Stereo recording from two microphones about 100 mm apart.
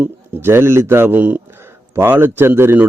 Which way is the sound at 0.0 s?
25° right (ahead or behind).